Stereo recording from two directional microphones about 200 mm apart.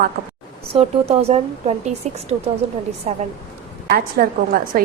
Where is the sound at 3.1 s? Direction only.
35° right (ahead or behind).